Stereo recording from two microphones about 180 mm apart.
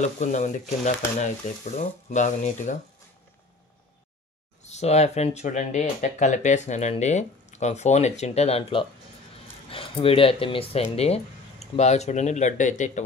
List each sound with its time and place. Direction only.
0.0 s frying: 40° left (ahead or behind)
4.6 s speech: 40° left (ahead or behind)